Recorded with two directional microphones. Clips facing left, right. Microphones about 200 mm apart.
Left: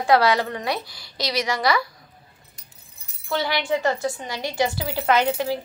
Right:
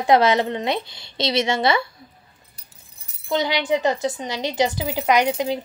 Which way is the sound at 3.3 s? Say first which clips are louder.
Right 3 dB; 20° right (ahead or behind).